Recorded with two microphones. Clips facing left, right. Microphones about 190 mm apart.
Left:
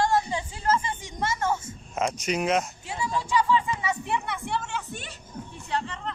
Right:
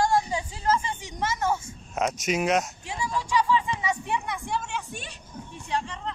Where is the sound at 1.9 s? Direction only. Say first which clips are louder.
Right 1 dB; centre (ahead or behind).